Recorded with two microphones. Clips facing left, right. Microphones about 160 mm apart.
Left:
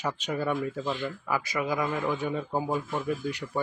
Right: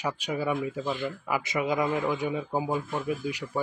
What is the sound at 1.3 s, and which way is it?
Speech, 20° right (ahead or behind).